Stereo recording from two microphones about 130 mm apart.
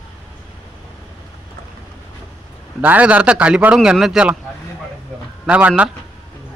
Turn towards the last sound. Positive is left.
turn(degrees=-10)  # may be behind; listen again after turning